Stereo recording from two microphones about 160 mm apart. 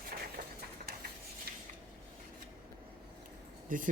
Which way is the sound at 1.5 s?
75° right (ahead or behind).